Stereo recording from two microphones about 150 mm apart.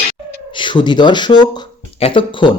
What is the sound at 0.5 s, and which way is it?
Speech, 30° left (ahead or behind).